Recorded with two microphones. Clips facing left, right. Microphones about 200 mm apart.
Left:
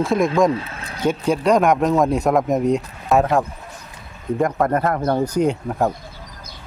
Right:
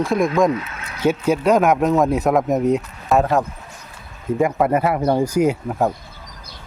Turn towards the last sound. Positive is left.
turn(degrees=-5)  # may be behind; listen again after turning